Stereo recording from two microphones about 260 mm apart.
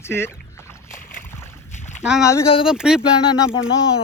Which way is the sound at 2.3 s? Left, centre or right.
Centre.